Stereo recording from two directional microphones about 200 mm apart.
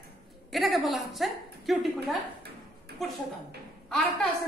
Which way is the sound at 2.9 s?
55° right (ahead or behind).